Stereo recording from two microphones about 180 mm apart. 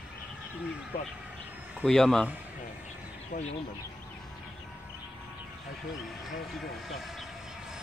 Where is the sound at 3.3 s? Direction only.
40° left (ahead or behind).